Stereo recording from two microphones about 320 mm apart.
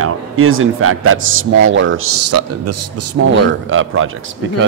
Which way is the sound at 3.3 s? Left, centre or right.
Right.